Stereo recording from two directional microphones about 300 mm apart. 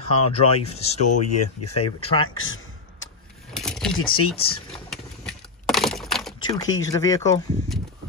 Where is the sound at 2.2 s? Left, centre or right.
Left.